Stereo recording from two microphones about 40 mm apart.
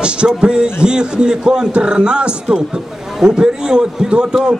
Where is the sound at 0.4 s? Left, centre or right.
Centre.